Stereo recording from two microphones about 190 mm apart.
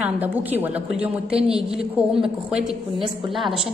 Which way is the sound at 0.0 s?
10° right (ahead or behind).